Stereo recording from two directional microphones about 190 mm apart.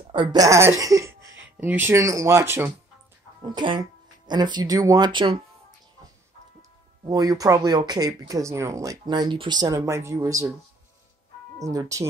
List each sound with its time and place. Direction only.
0.1 s speech: 25° right (ahead or behind)
3.4 s speech: 25° right (ahead or behind)
7.1 s speech: 20° right (ahead or behind)
11.6 s speech: 15° right (ahead or behind)